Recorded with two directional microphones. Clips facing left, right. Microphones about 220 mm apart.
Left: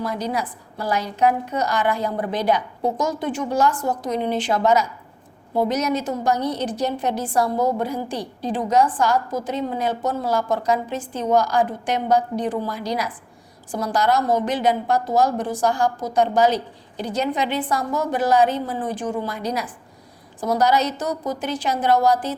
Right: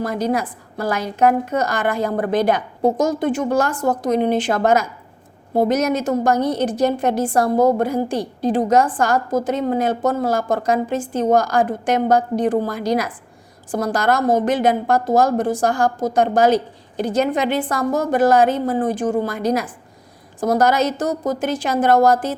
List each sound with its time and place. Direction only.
0.0 s a woman's voice: 50° right (ahead or behind)